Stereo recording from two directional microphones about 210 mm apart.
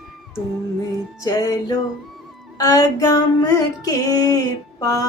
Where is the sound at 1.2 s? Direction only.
15° left (ahead or behind).